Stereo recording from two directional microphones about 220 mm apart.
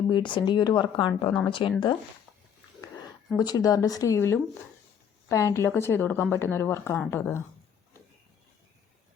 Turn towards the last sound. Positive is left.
turn(degrees=10)  # may be behind; listen again after turning